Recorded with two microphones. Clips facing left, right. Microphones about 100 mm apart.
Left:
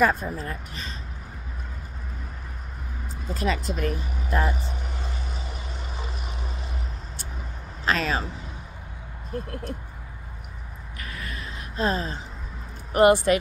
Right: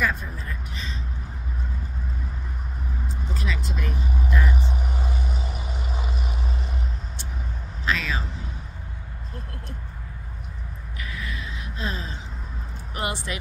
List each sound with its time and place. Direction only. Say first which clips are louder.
0.0 s speech: left 5 dB; 45° left (ahead or behind)
3.3 s speech: left 6 dB; 45° left (ahead or behind)
7.8 s a sound: left 2 dB; 45° left (ahead or behind)
11.0 s gasp: right 2 dB; 45° left (ahead or behind)
12.9 s speech: left 13 dB; 50° left (ahead or behind)